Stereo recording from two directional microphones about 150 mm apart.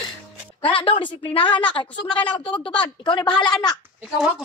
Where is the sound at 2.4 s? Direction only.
35° left (ahead or behind).